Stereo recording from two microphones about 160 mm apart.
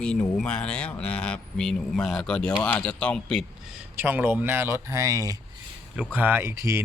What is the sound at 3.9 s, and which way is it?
Speech, 10° right (ahead or behind).